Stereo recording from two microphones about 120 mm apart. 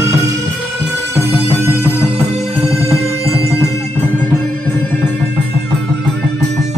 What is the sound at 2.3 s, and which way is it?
Music, 60° right (ahead or behind).